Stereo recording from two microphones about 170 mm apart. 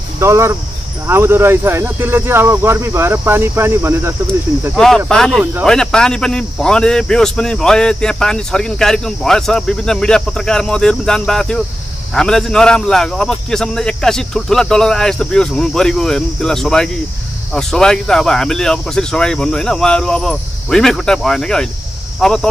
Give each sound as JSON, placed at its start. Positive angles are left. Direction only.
{"t": 0.2, "sound": "speech", "side_deg": -15}
{"t": 4.7, "sound": "speech", "side_deg": 5}
{"t": 5.4, "sound": "speech", "side_deg": -10}
{"t": 5.7, "sound": "speech", "side_deg": 5}